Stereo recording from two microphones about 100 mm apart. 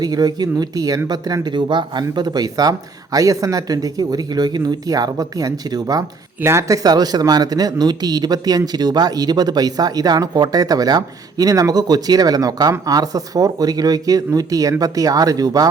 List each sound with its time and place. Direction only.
0.0 s speech: 40° right (ahead or behind)